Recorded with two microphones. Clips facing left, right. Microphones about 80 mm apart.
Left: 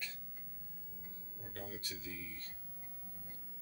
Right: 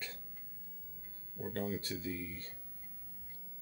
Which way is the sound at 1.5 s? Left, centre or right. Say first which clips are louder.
Right 9 dB; right.